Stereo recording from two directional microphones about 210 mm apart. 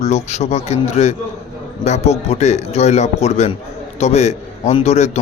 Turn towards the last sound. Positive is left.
turn(degrees=30)  # may be behind; listen again after turning